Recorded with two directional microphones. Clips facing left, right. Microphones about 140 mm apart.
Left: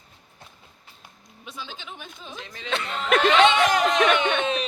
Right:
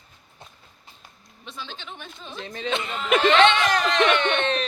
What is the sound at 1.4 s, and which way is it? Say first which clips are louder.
Speech: even; 10° left (ahead or behind).